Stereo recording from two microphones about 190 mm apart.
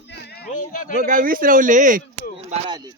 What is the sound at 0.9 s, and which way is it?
A man's voice, 40° right (ahead or behind).